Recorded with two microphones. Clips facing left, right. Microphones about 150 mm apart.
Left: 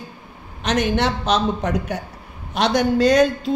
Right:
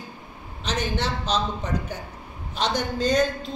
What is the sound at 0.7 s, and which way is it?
A woman's voice, 70° left (ahead or behind).